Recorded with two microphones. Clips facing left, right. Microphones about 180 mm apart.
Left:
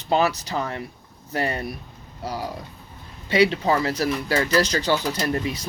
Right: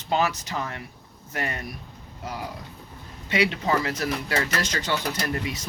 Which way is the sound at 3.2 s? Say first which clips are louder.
Left 5 dB; 35° left (ahead or behind).